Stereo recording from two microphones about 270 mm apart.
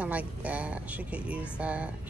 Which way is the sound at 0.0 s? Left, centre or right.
Centre.